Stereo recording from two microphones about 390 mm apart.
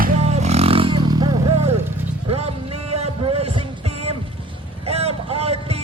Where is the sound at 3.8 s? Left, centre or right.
Centre.